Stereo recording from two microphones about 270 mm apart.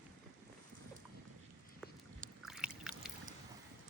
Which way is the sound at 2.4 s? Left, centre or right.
Centre.